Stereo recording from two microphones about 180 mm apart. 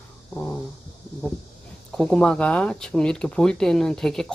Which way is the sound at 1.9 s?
5° left (ahead or behind).